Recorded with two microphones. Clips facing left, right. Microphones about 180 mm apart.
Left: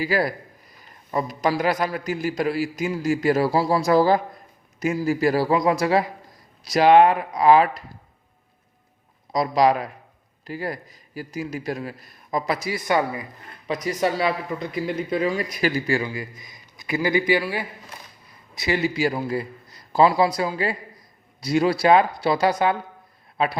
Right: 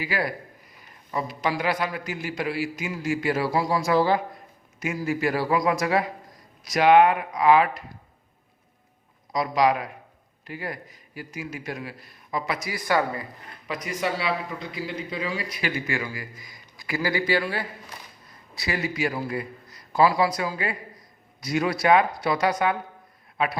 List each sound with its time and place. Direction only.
0.0 s a man's voice: 35° left (ahead or behind)
9.3 s a man's voice: 35° left (ahead or behind); by 13.2 s 20° left (ahead or behind)
13.7 s speech: 40° left (ahead or behind)
16.0 s a man's voice: 20° left (ahead or behind)
18.5 s a man's voice: 25° left (ahead or behind)